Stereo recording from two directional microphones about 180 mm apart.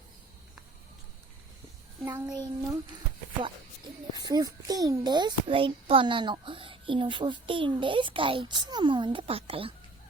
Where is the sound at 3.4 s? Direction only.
25° right (ahead or behind).